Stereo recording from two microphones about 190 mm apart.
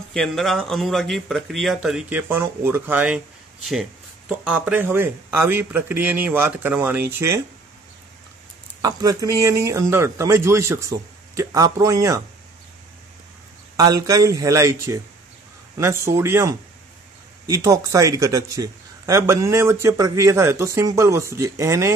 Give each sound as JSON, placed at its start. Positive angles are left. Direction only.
{"t": 0.1, "sound": "speech", "side_deg": 0}
{"t": 4.5, "sound": "speech", "side_deg": -5}
{"t": 8.8, "sound": "speech", "side_deg": -20}
{"t": 13.7, "sound": "speech", "side_deg": -20}